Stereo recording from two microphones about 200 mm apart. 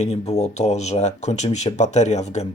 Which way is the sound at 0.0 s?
35° left (ahead or behind).